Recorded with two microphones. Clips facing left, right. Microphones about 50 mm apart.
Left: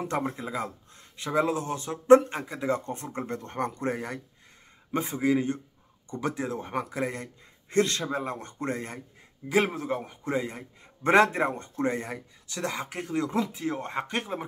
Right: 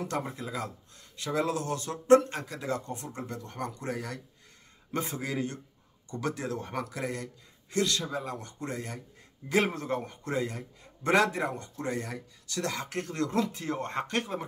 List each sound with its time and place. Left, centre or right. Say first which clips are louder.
0.0 s speech: left 4 dB; left
2.8 s speech: left 4 dB; left
4.9 s speech: left 7 dB; centre; by 9.0 s left
9.5 s speech: left 2 dB; centre
10.2 s speech: left 4 dB; centre
11.1 s speech: left 4 dB; left